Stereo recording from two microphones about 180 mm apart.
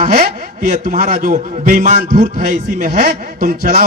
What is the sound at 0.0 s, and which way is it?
A man's voice, 50° right (ahead or behind).